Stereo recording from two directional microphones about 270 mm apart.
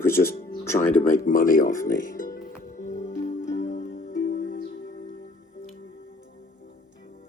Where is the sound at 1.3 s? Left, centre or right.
Left.